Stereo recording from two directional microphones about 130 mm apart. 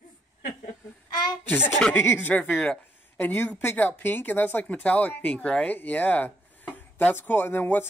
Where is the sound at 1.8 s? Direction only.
15° left (ahead or behind).